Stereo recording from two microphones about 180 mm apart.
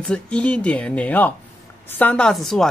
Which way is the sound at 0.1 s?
5° left (ahead or behind).